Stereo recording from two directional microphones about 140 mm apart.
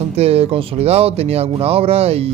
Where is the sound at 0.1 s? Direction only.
45° right (ahead or behind).